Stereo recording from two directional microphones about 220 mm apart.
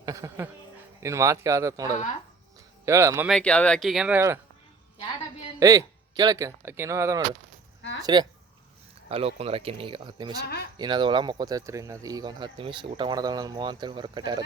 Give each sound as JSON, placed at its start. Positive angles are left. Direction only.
{"t": 0.0, "sound": "music", "side_deg": -15}
{"t": 1.0, "sound": "speech", "side_deg": -15}
{"t": 3.2, "sound": "speech", "side_deg": 5}
{"t": 5.5, "sound": "speech", "side_deg": -15}
{"t": 7.8, "sound": "a sound", "side_deg": 55}
{"t": 8.0, "sound": "speech", "side_deg": -20}